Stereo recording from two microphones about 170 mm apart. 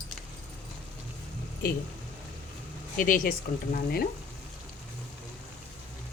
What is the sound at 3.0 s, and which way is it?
Speech, 55° left (ahead or behind).